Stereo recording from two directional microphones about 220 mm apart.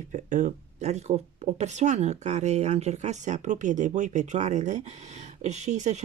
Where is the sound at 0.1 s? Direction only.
35° right (ahead or behind).